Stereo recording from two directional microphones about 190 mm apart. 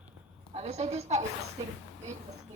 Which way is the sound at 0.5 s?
35° right (ahead or behind).